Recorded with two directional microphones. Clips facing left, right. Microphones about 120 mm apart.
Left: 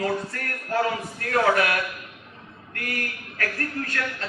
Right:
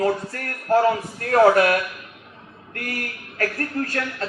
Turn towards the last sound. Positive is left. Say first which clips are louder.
# right 4 dB
turn(degrees=-35)  # may be behind; listen again after turning